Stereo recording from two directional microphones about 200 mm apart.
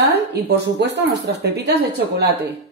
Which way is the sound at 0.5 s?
60° right (ahead or behind).